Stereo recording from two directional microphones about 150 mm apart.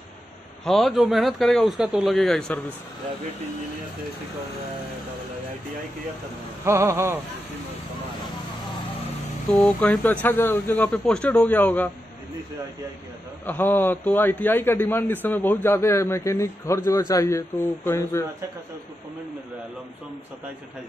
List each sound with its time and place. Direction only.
0.7 s speech: centre (ahead or behind)
6.6 s a sound: 20° right (ahead or behind)
9.5 s a man's voice: 5° left (ahead or behind)
13.5 s a man's voice: 15° left (ahead or behind)